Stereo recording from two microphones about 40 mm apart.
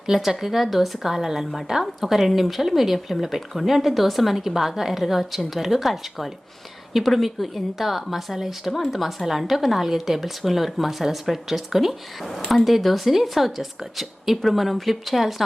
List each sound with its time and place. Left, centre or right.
0.1 s a woman's voice: centre